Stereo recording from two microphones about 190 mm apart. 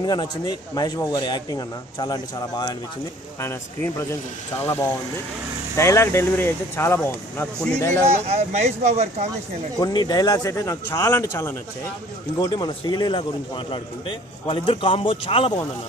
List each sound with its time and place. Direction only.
0.0 s a man's voice: 20° left (ahead or behind)
8.2 s speech: 35° right (ahead or behind)
9.8 s a man's voice: 20° left (ahead or behind)